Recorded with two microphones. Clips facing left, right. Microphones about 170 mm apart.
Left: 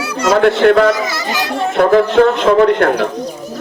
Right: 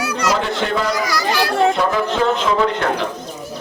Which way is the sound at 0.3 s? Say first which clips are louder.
Left 11 dB; 65° left (ahead or behind).